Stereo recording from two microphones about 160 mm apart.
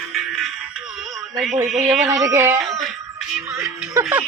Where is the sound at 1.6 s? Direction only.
Centre (ahead or behind).